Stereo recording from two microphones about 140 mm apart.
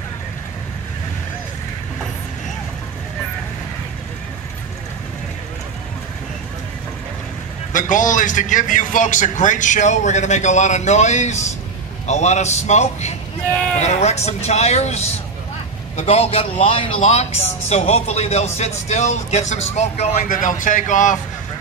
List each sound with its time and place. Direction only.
7.7 s a man's voice: 65° left (ahead or behind)
20.2 s speech: 70° left (ahead or behind)